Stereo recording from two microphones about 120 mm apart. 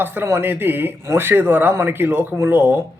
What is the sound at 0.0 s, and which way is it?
Speech, 15° right (ahead or behind).